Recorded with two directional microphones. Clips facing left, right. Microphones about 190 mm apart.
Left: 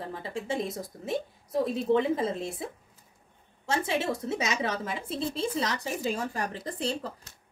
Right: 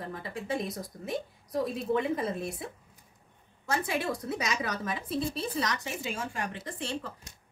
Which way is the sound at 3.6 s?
25° left (ahead or behind).